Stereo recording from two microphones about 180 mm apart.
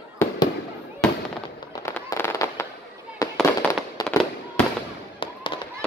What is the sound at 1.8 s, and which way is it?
Fireworks, 15° left (ahead or behind).